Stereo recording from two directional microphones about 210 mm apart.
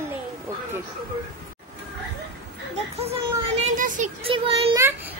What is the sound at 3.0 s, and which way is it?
Children playing, 30° right (ahead or behind).